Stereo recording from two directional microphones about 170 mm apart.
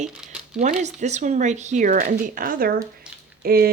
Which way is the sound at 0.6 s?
45° right (ahead or behind).